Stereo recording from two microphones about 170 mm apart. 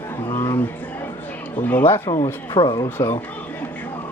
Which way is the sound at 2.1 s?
25° left (ahead or behind).